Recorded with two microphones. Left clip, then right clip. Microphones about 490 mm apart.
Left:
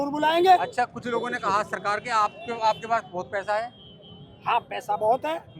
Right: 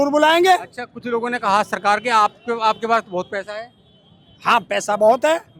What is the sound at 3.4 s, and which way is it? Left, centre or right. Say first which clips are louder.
Speech: left 4 dB; right.